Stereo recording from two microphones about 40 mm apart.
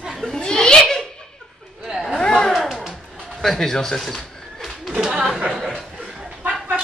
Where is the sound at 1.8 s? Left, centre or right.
Centre.